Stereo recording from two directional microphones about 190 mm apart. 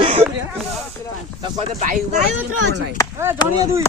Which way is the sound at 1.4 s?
40° right (ahead or behind).